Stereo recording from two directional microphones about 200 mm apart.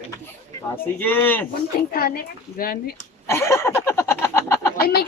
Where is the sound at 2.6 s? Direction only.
50° left (ahead or behind).